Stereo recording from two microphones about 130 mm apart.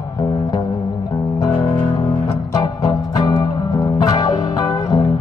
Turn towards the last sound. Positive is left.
turn(degrees=30)  # may be behind; listen again after turning